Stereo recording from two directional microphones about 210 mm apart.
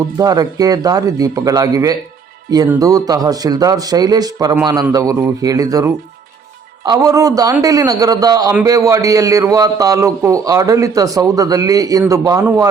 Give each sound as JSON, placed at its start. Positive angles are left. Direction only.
{"t": 0.2, "sound": "a man's voice", "side_deg": -15}